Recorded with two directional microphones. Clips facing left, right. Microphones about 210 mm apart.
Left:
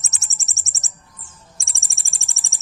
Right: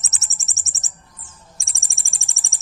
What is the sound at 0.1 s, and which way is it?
Bird, centre (ahead or behind).